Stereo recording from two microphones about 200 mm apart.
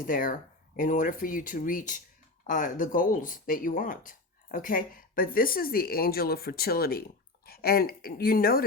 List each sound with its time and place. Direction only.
0.0 s a woman's voice: 45° left (ahead or behind)